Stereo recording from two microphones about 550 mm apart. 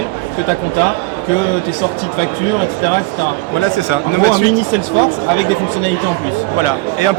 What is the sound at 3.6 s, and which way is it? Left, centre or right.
Speech, left.